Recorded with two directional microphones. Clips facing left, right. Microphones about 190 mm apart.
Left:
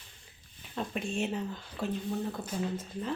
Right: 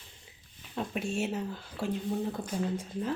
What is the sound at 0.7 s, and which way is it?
Speech, 5° right (ahead or behind).